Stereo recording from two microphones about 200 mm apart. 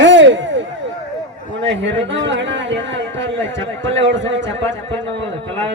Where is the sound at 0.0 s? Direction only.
65° right (ahead or behind).